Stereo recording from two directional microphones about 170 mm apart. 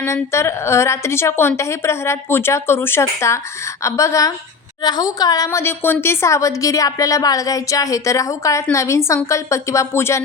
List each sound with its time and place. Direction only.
0.0 s a woman's voice: 15° left (ahead or behind)